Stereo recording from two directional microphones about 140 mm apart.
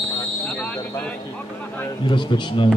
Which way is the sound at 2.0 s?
35° left (ahead or behind).